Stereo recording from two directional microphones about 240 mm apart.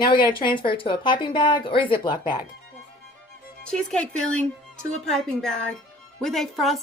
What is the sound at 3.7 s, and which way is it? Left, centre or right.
A woman's voice, centre.